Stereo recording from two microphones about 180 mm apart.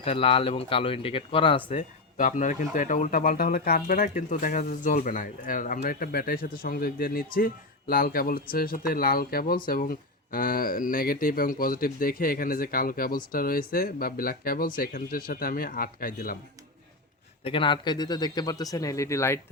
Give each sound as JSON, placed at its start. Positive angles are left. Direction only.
{"t": 0.0, "sound": "speech", "side_deg": 30}
{"t": 2.1, "sound": "speech", "side_deg": 45}
{"t": 17.4, "sound": "speech", "side_deg": 30}